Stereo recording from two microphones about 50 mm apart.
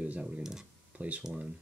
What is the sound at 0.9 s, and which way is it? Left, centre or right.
Speech, right.